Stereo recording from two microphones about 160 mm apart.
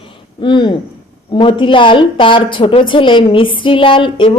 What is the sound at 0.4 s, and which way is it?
A woman's voice, 30° left (ahead or behind).